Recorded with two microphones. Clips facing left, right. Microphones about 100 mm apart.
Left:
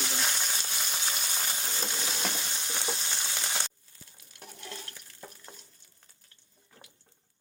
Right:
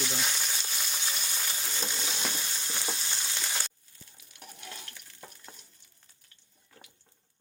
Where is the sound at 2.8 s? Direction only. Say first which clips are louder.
Left 2 dB; 20° left (ahead or behind).